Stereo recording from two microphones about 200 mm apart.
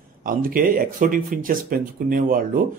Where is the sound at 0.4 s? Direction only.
45° right (ahead or behind).